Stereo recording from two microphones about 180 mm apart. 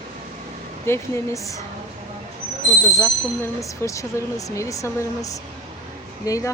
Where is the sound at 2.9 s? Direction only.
15° left (ahead or behind).